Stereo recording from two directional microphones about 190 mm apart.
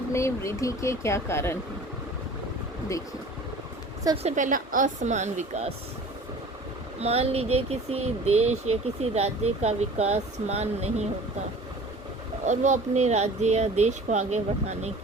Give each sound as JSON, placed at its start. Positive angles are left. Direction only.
{"t": 0.1, "sound": "speech", "side_deg": 15}
{"t": 4.2, "sound": "speech", "side_deg": -40}
{"t": 7.0, "sound": "speech", "side_deg": -30}
{"t": 12.5, "sound": "speech", "side_deg": -40}